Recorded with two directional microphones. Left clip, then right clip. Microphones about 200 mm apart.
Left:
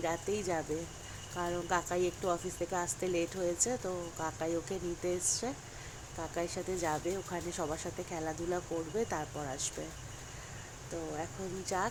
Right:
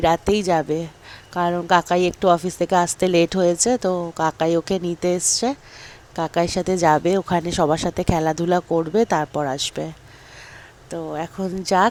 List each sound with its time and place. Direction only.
0.0 s a woman's voice: 45° right (ahead or behind)
11.1 s a woman's voice: 40° right (ahead or behind)